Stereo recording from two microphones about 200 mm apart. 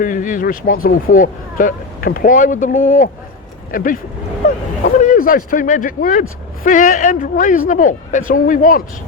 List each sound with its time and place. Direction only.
0.0 s speech: 40° left (ahead or behind)